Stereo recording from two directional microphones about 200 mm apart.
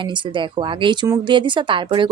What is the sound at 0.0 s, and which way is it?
A woman's voice, 25° right (ahead or behind).